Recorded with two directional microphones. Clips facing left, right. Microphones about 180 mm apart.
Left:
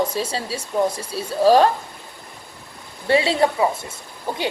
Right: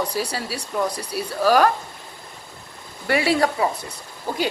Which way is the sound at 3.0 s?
25° left (ahead or behind).